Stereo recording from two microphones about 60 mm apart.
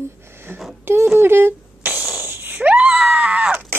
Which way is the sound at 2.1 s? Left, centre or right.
Right.